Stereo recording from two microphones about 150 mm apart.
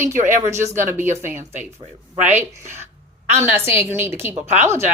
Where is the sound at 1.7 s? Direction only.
50° right (ahead or behind).